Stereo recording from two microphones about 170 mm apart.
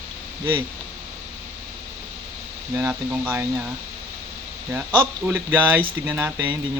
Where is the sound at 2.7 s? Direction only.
10° right (ahead or behind).